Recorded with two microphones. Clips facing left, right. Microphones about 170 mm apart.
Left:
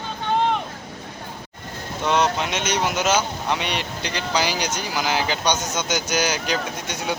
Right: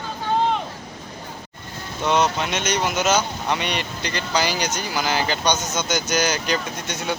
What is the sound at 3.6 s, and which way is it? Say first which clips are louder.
Speech: even; 55° right (ahead or behind).